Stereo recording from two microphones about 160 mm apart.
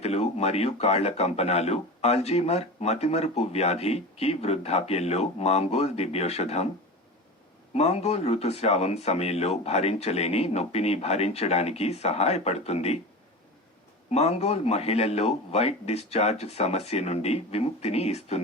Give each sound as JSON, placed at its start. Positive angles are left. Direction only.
{"t": 0.0, "sound": "a man's voice", "side_deg": 40}
{"t": 7.7, "sound": "a man's voice", "side_deg": 40}
{"t": 14.1, "sound": "a man's voice", "side_deg": 40}